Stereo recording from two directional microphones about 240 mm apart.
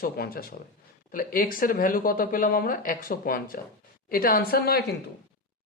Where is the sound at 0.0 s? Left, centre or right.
Left.